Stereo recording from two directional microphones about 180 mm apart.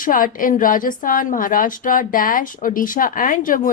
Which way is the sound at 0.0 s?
50° left (ahead or behind).